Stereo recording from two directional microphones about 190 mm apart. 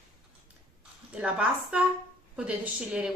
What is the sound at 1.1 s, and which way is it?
Speech, 5° right (ahead or behind).